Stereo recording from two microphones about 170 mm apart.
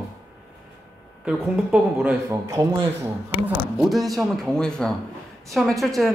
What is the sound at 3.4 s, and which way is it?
Speech, centre (ahead or behind).